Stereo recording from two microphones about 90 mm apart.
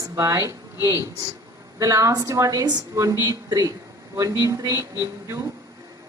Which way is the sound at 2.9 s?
35° right (ahead or behind).